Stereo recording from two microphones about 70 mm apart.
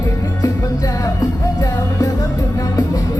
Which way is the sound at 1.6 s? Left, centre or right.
Left.